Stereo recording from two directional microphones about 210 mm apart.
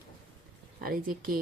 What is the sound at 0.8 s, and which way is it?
Speech, 40° right (ahead or behind).